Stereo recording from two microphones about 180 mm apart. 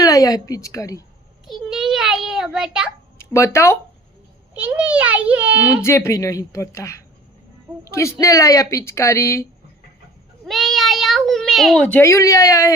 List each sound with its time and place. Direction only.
0.0 s a woman's voice: 20° left (ahead or behind)
1.5 s a child's voice: centre (ahead or behind)
3.2 s speech: 15° left (ahead or behind)
4.5 s a child's voice: 10° right (ahead or behind)
5.7 s speech: 15° left (ahead or behind)
10.4 s a child's voice: centre (ahead or behind); by 12.7 s 15° left (ahead or behind)